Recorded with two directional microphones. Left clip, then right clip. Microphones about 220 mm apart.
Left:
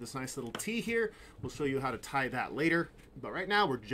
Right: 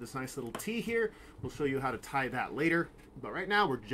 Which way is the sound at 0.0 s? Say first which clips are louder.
Right 1 dB; 5° left (ahead or behind).